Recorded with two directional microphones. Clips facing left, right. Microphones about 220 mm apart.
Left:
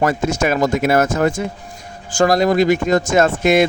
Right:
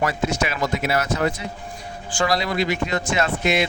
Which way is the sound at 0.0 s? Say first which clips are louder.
Left 6 dB; 45° left (ahead or behind).